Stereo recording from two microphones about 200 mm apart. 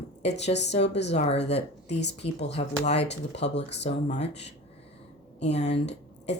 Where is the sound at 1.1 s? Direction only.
30° left (ahead or behind).